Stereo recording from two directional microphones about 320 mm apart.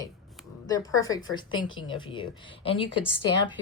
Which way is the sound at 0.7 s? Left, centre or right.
Centre.